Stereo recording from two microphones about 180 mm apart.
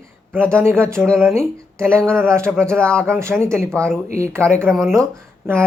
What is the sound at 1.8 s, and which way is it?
Speech, 5° left (ahead or behind).